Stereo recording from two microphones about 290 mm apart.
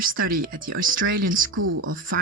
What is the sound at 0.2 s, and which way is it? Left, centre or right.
Speech, right.